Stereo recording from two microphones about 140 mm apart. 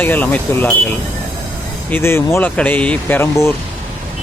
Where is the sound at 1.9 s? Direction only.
15° left (ahead or behind).